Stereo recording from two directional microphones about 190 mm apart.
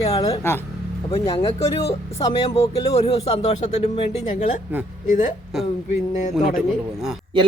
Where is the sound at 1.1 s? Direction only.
30° left (ahead or behind).